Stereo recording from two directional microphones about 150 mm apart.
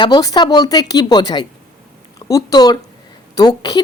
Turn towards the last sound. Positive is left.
turn(degrees=25)  # may be behind; listen again after turning